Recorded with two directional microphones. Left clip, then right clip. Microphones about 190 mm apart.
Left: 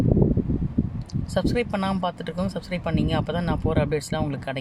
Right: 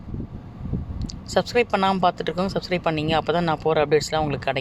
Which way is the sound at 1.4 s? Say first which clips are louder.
Right 5 dB; 15° right (ahead or behind).